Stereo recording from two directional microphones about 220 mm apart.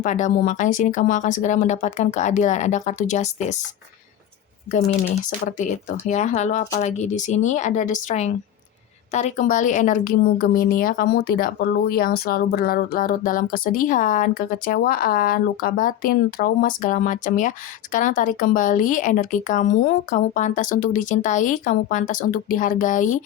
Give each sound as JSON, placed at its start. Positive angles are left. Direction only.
{"t": 0.0, "sound": "a woman's voice", "side_deg": 35}
{"t": 5.5, "sound": "a woman's voice", "side_deg": 35}